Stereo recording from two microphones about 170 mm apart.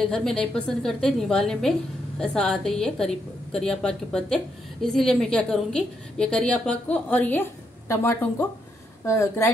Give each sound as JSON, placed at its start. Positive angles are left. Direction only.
{"t": 0.0, "sound": "a woman's voice", "side_deg": 5}